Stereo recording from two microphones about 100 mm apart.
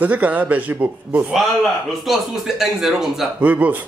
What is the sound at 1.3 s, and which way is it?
A man's voice, centre (ahead or behind).